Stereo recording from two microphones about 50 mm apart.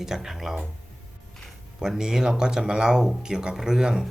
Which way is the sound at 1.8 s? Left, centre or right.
Centre.